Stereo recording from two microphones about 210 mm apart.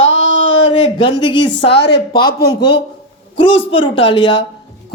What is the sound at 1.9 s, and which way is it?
Speech, 20° left (ahead or behind).